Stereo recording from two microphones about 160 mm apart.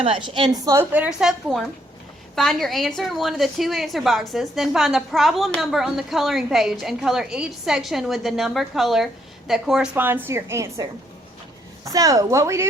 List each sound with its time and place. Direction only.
0.0 s a woman's voice: 30° right (ahead or behind)
0.6 s a woman's voice: 15° right (ahead or behind)
11.9 s speech: 20° right (ahead or behind)